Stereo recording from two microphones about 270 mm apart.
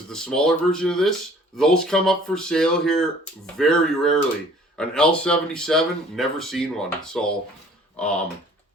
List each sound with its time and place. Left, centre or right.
0.1 s speech: centre